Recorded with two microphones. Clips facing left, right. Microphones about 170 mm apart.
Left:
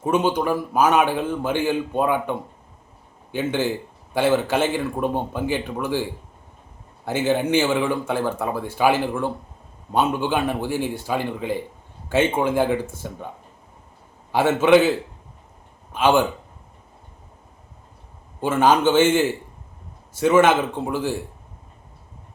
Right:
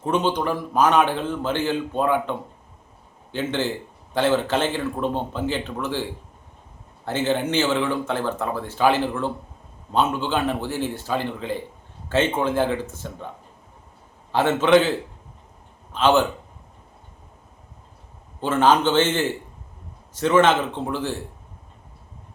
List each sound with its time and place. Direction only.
0.0 s a man's voice: 10° left (ahead or behind)
14.3 s a man's voice: 10° left (ahead or behind)
18.3 s a man's voice: 10° left (ahead or behind)